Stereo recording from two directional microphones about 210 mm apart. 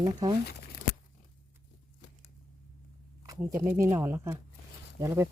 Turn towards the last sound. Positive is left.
turn(degrees=-15)  # may be behind; listen again after turning